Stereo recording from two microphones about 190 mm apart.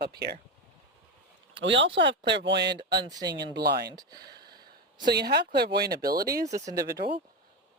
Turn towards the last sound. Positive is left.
turn(degrees=-20)  # may be behind; listen again after turning